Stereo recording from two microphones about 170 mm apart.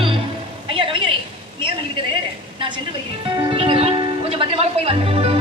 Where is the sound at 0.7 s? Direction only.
30° right (ahead or behind).